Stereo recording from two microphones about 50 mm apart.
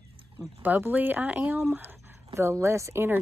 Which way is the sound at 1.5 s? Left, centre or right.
Right.